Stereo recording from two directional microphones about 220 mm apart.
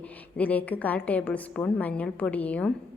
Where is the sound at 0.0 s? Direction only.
5° left (ahead or behind).